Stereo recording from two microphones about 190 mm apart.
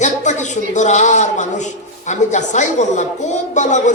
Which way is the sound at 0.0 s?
40° left (ahead or behind).